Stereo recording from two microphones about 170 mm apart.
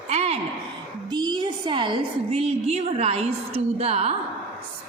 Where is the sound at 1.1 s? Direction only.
25° right (ahead or behind).